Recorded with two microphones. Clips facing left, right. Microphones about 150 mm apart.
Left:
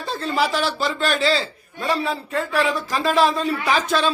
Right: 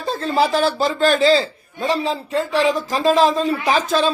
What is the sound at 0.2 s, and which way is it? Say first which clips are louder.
Speech: right 4 dB; 35° right (ahead or behind).